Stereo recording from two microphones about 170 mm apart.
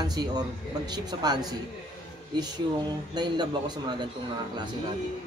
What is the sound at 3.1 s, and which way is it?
Speech, 25° right (ahead or behind).